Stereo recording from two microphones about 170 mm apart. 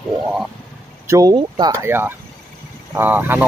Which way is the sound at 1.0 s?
20° right (ahead or behind).